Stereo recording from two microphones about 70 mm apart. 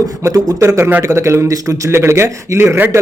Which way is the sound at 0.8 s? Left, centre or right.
Right.